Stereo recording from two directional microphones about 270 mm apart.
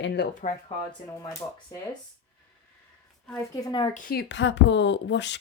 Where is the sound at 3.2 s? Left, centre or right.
Centre.